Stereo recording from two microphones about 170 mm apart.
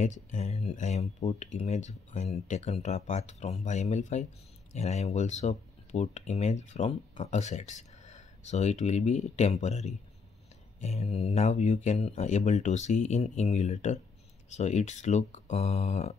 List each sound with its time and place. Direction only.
0.0 s speech: 45° left (ahead or behind)